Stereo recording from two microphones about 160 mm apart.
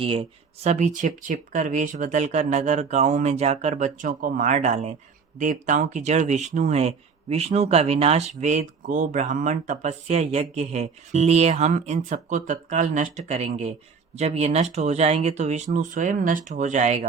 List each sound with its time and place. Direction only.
0.0 s speech: 35° right (ahead or behind)